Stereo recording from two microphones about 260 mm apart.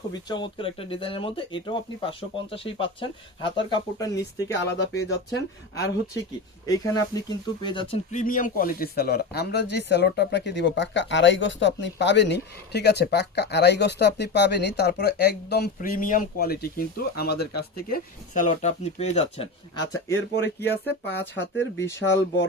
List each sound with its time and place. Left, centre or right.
0.1 s speech: centre
4.5 s speech: left
6.7 s speech: centre
20.3 s speech: left
21.8 s speech: centre